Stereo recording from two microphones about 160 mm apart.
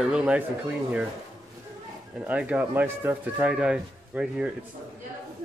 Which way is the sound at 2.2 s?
10° right (ahead or behind).